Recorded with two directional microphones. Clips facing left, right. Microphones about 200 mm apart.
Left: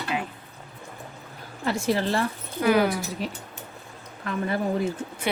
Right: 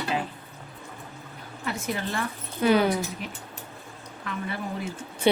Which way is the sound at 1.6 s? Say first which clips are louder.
Left 6 dB; 35° left (ahead or behind).